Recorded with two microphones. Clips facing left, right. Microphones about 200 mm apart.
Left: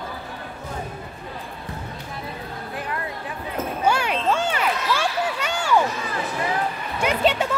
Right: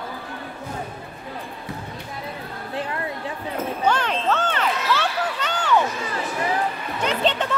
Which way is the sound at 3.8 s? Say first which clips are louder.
Left 1 dB; 10° left (ahead or behind).